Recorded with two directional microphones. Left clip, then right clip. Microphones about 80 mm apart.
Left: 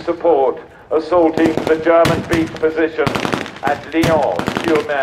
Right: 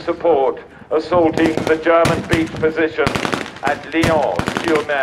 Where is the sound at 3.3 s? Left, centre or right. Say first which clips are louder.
Left 1 dB; right.